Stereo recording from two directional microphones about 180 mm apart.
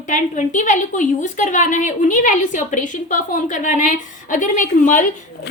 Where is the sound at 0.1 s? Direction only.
45° left (ahead or behind).